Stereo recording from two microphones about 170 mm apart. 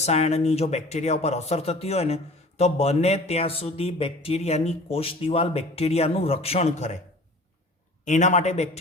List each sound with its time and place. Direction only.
0.0 s speech: 40° left (ahead or behind)
8.0 s a man's voice: 45° left (ahead or behind)